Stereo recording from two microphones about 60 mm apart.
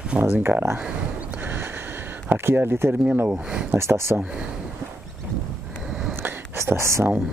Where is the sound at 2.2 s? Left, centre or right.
Right.